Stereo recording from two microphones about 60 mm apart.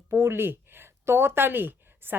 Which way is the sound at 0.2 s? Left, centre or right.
Right.